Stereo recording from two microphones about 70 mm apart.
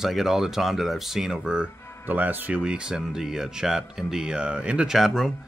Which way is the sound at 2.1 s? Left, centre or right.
Right.